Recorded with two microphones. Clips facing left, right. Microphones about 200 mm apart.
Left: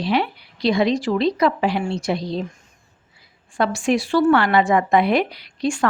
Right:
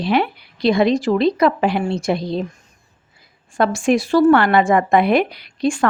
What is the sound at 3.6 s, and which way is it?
A woman's voice, 45° right (ahead or behind).